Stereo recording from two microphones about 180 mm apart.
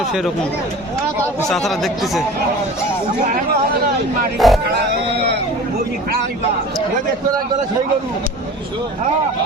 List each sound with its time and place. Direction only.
1.5 s speech: centre (ahead or behind)
4.4 s speech: centre (ahead or behind)
4.7 s speech: 70° right (ahead or behind)